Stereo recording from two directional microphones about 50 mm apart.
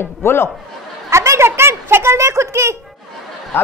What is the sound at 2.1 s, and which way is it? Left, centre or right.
Speech, right.